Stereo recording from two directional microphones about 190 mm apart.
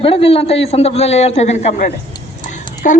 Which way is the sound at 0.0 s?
30° left (ahead or behind).